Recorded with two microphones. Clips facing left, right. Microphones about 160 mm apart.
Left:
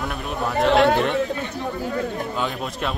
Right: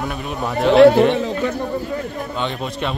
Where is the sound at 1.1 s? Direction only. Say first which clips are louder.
Right 4 dB; 70° right (ahead or behind).